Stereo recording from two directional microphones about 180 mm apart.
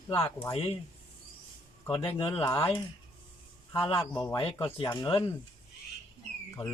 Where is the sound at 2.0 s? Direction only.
30° left (ahead or behind).